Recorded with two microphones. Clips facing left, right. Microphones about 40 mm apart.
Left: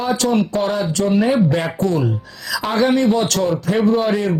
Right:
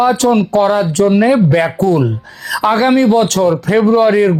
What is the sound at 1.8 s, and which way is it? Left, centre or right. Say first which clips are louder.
Speech: right 6 dB; right.